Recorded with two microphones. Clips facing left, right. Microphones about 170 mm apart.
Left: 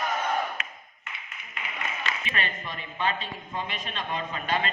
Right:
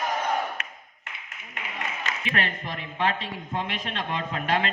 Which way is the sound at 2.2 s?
85° right.